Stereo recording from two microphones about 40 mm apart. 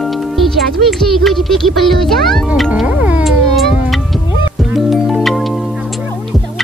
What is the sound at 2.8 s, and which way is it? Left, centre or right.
Music, right.